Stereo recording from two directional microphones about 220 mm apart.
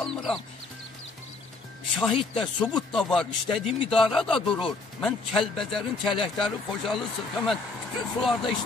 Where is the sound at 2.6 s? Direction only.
5° left (ahead or behind).